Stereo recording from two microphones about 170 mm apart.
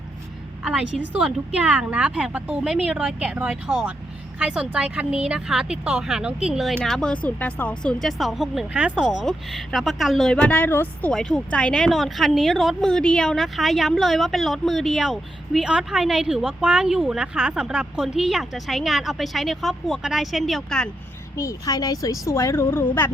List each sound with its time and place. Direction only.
0.6 s a woman's voice: 5° right (ahead or behind)
21.3 s speech: 20° left (ahead or behind)